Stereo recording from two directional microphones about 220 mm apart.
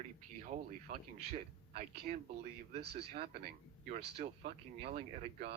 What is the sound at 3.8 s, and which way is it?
Speech, 30° right (ahead or behind).